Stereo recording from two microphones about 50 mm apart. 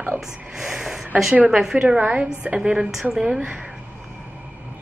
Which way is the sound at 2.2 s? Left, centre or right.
Centre.